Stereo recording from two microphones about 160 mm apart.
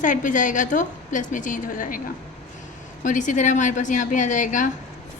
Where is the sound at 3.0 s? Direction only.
50° left (ahead or behind).